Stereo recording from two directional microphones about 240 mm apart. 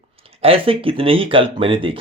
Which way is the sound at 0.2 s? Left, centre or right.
Right.